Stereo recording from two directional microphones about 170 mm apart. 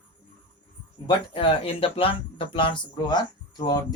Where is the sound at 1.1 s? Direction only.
30° left (ahead or behind).